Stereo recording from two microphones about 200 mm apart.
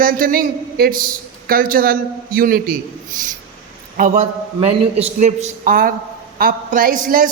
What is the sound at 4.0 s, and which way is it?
A man's voice, 35° right (ahead or behind).